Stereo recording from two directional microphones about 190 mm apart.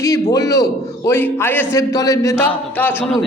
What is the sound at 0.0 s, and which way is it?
A man's voice, 20° left (ahead or behind).